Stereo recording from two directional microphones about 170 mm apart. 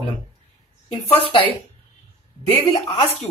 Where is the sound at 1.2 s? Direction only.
35° left (ahead or behind).